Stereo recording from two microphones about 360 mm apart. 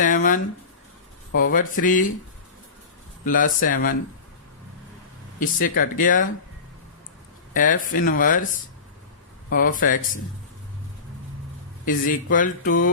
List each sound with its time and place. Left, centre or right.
0.0 s a sound: left
1.4 s speech: left
3.2 s speech: left
5.4 s speech: left
7.5 s speech: left
9.5 s speech: left
11.9 s speech: left